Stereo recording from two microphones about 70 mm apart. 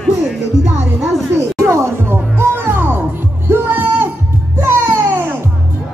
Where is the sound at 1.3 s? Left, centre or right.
Right.